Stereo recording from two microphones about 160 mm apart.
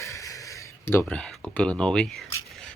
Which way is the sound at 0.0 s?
20° left (ahead or behind).